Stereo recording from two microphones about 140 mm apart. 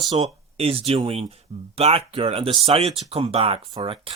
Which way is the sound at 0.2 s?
45° right (ahead or behind).